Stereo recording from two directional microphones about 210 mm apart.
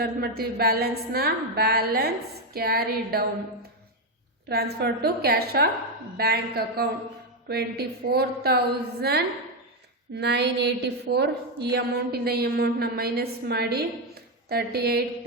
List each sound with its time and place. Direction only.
0.0 s a woman's voice: 45° right (ahead or behind)
4.4 s a woman's voice: 50° right (ahead or behind)